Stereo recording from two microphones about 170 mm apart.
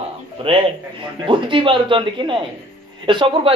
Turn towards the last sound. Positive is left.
turn(degrees=-30)  # may be behind; listen again after turning